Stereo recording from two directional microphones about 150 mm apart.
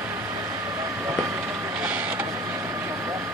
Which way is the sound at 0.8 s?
15° right (ahead or behind).